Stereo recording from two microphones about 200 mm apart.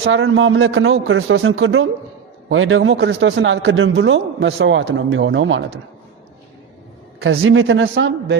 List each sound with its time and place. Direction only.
0.0 s a man's voice: 75° right (ahead or behind)
7.2 s a man's voice: 85° right; by 8.4 s 65° right (ahead or behind)